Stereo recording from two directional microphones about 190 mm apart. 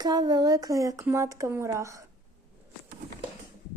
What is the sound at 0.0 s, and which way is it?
Speech, 20° right (ahead or behind).